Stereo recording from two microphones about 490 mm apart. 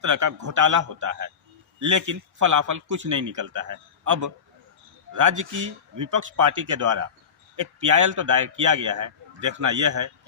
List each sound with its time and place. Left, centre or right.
0.0 s a man's voice: right